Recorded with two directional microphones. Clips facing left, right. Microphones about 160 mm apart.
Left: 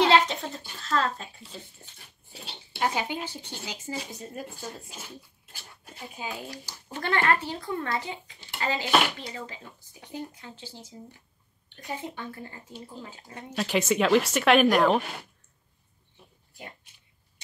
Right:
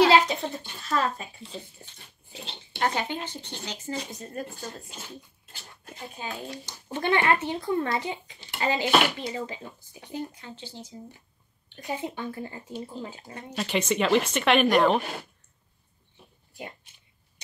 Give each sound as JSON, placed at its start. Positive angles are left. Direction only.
{"t": 0.0, "sound": "a sound", "side_deg": -5}
{"t": 2.8, "sound": "speech", "side_deg": 5}
{"t": 6.5, "sound": "speech", "side_deg": -20}
{"t": 10.4, "sound": "speech", "side_deg": 5}
{"t": 11.7, "sound": "speech", "side_deg": -15}
{"t": 13.3, "sound": "speech", "side_deg": 0}